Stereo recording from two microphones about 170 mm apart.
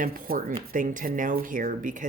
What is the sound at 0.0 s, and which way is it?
Speech, 55° right (ahead or behind).